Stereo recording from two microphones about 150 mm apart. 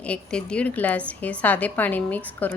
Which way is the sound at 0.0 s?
5° left (ahead or behind).